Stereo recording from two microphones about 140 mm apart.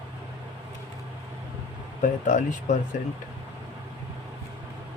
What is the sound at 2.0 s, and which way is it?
Speech, 65° left (ahead or behind).